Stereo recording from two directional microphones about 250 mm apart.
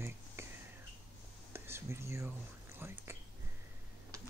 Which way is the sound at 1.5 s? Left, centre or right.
Centre.